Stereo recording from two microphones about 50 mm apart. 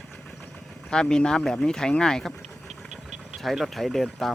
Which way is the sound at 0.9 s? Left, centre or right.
Centre.